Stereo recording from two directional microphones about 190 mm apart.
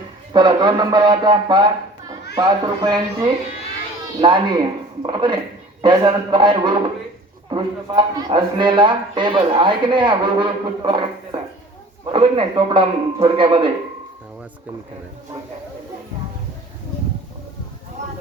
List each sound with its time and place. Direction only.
0.3 s speech: 25° right (ahead or behind)